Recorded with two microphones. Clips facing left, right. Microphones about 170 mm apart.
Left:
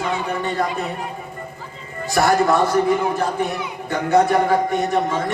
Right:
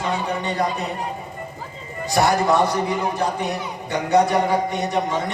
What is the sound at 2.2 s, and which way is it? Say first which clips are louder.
Speech: left 2 dB; 50° left (ahead or behind).